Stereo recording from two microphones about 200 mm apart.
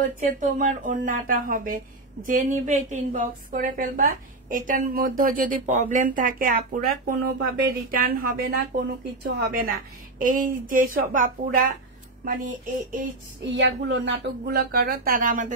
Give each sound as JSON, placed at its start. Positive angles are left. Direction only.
{"t": 0.3, "sound": "a woman's voice", "side_deg": -40}
{"t": 13.4, "sound": "a woman's voice", "side_deg": -60}